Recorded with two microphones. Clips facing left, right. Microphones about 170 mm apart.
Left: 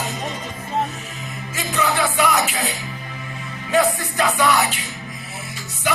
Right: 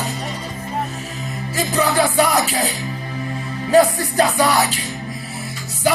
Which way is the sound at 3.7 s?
35° right (ahead or behind).